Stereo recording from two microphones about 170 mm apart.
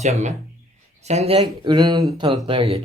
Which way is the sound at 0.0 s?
45° right (ahead or behind).